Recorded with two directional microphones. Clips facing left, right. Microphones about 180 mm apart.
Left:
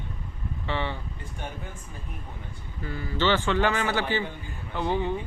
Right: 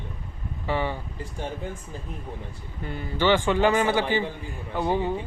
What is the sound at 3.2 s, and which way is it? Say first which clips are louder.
A man's voice: right 3 dB; 15° right (ahead or behind).